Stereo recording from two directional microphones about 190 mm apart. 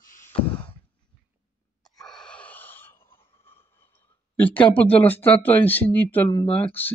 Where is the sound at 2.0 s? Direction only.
5° left (ahead or behind).